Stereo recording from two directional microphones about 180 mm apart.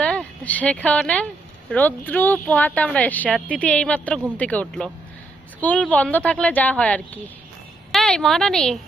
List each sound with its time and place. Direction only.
0.0 s a woman's voice: 5° left (ahead or behind)